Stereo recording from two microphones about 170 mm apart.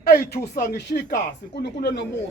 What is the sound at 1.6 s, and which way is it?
Speech, 80° left.